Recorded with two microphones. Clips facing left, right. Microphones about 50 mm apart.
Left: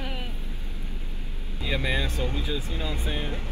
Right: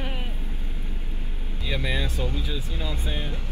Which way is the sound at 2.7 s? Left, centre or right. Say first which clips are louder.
Left 1 dB; left.